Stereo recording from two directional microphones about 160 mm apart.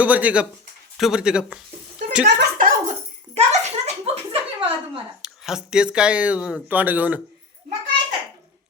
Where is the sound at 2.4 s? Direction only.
60° right (ahead or behind).